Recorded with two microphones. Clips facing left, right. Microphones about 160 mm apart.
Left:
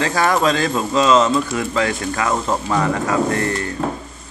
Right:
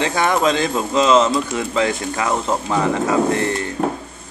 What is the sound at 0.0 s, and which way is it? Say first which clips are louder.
Speech: even; 20° right (ahead or behind).